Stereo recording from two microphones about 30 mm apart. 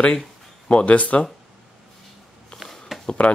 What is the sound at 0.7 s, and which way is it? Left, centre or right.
Speech, left.